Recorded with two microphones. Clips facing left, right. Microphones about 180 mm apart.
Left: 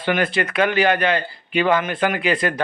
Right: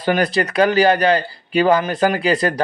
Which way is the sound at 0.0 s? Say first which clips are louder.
Right 3 dB; 40° right (ahead or behind).